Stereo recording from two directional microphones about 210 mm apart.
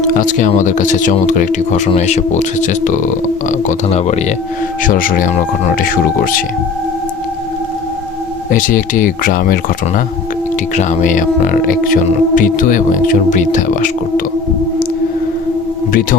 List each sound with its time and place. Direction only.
0.0 s speech: 40° left (ahead or behind)
8.4 s speech: 40° left (ahead or behind)